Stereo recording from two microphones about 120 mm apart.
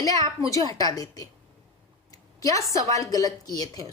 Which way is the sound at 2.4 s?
25° left (ahead or behind).